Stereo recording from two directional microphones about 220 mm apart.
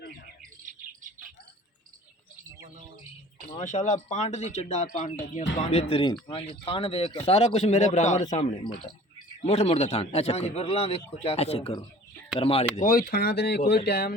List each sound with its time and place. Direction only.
3.6 s a man's voice: 35° left (ahead or behind)
12.7 s speech: 40° left (ahead or behind)